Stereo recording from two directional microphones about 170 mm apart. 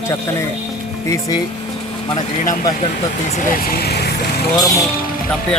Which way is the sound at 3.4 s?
65° left (ahead or behind).